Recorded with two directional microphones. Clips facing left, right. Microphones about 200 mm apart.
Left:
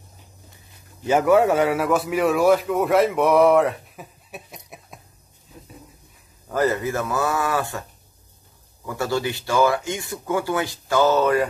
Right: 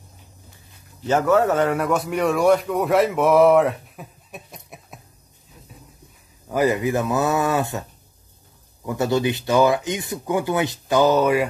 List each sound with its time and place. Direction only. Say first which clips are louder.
1.0 s a man's voice: left 1 dB; 10° left (ahead or behind)
6.5 s speech: right 2 dB; 15° right (ahead or behind)
8.8 s speech: right 4 dB; 20° right (ahead or behind)